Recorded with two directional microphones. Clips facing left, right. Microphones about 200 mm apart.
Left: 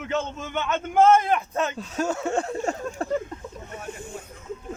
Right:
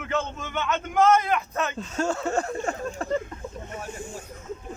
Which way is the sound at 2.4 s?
25° left (ahead or behind).